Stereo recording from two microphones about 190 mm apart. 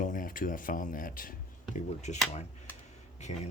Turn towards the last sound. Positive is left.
turn(degrees=35)  # may be behind; listen again after turning